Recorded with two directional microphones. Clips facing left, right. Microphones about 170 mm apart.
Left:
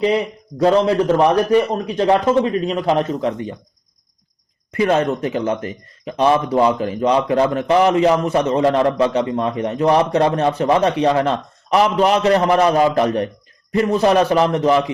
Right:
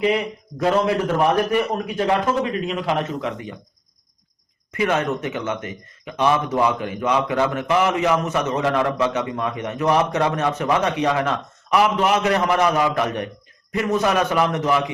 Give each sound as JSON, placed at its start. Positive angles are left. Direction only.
{"t": 0.6, "sound": "speech", "side_deg": 30}
{"t": 4.7, "sound": "speech", "side_deg": 35}